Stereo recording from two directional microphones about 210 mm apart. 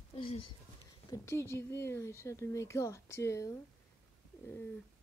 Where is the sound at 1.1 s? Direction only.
15° left (ahead or behind).